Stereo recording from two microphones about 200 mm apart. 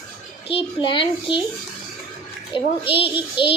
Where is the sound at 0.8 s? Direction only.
25° left (ahead or behind).